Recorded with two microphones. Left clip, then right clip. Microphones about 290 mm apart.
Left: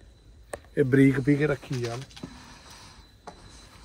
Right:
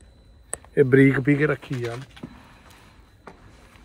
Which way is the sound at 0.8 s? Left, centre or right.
Centre.